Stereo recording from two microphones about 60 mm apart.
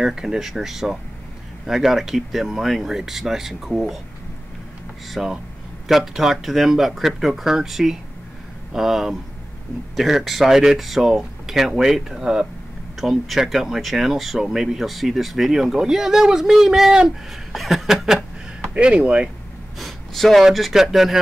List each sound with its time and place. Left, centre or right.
0.0 s speech: centre
5.1 s speech: centre
18.8 s speech: centre
19.8 s a sound: centre
20.4 s speech: centre